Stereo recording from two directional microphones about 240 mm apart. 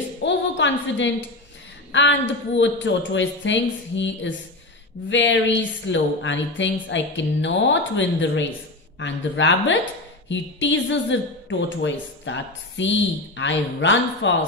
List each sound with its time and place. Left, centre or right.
0.2 s a woman's voice: left